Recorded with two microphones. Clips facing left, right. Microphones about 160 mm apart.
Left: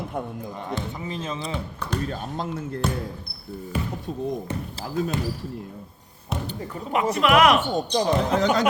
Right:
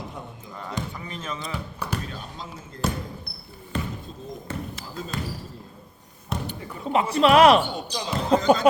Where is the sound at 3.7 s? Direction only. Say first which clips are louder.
Left 1 dB; 10° left (ahead or behind).